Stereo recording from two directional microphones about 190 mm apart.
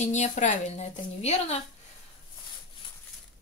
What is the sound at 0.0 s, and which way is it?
Speech, 35° left (ahead or behind).